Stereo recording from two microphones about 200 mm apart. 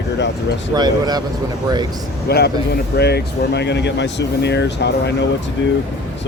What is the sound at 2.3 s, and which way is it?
Speech, 55° left (ahead or behind).